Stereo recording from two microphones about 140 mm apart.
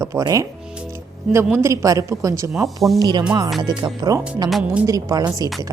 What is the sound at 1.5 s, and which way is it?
A woman's voice, 20° right (ahead or behind).